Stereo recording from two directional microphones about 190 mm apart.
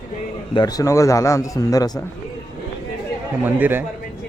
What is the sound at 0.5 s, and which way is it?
A man's voice, 20° left (ahead or behind).